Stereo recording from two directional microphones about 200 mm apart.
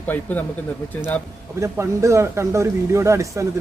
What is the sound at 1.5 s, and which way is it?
Speech, 15° right (ahead or behind).